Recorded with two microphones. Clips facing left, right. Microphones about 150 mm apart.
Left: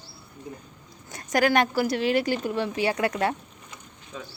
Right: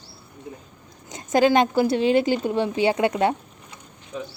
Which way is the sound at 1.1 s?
20° right (ahead or behind).